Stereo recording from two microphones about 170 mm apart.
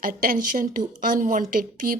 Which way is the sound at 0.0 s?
55° right (ahead or behind).